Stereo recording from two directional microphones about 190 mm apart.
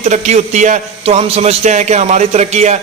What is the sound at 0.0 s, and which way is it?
A man's voice, 35° right (ahead or behind).